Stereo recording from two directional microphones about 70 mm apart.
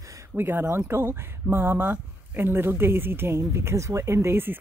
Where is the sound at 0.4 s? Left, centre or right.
Right.